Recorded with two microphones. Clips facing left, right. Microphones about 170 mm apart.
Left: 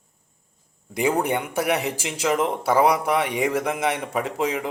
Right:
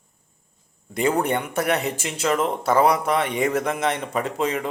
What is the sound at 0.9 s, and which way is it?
A man's voice, 10° left (ahead or behind).